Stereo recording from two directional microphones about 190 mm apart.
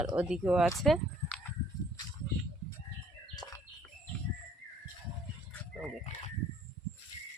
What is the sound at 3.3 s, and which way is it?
Bird, 20° left (ahead or behind).